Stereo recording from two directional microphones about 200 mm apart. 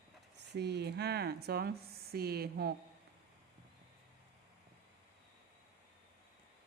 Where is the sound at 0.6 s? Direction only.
55° right (ahead or behind).